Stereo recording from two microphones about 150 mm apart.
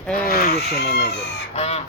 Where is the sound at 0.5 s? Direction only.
90° left.